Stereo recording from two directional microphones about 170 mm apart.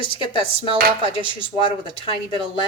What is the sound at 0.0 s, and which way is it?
Speech, 30° left (ahead or behind).